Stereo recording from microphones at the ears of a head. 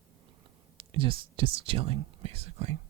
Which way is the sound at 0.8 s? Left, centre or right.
Right.